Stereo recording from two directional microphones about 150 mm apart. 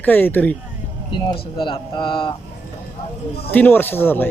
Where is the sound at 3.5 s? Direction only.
15° left (ahead or behind).